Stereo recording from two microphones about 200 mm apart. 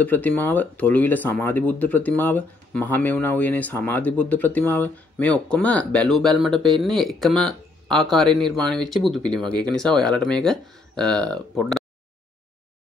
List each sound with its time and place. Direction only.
0.0 s speech: 10° left (ahead or behind)